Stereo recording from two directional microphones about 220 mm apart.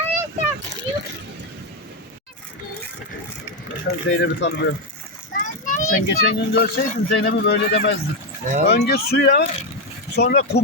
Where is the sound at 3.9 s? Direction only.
45° left (ahead or behind).